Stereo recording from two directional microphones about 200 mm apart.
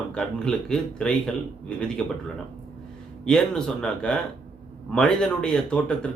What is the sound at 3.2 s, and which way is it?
Speech, 5° left (ahead or behind).